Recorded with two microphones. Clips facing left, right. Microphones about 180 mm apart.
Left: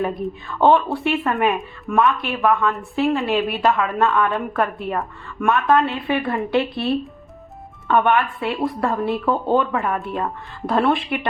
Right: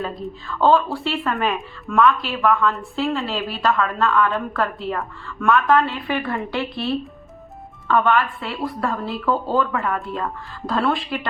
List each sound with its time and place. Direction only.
0.0 s a woman's voice: 20° left (ahead or behind)